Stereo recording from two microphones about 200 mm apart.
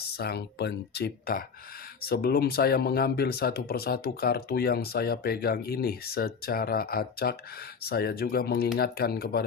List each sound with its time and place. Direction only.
0.2 s speech: 55° left (ahead or behind)